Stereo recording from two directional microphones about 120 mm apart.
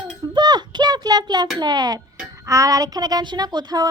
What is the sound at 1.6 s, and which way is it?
A child's voice, 35° right (ahead or behind).